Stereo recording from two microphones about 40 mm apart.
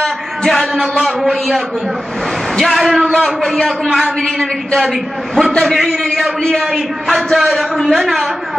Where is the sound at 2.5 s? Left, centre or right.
Centre.